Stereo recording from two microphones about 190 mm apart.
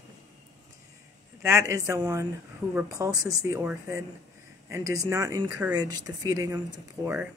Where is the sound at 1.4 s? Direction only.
15° right (ahead or behind).